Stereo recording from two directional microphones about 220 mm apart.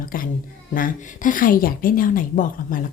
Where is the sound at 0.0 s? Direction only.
40° left (ahead or behind).